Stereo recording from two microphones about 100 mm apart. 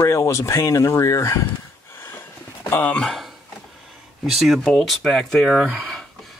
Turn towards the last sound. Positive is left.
turn(degrees=0)  # may be behind; listen again after turning